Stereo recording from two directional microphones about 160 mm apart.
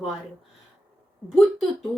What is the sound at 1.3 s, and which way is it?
Speech, centre (ahead or behind).